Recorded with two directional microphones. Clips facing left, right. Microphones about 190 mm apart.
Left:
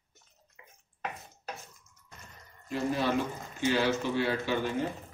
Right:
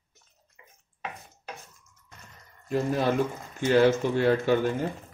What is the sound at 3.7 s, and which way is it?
A man's voice, 50° right (ahead or behind).